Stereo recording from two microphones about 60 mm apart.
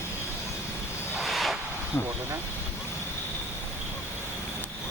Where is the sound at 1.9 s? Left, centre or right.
Left.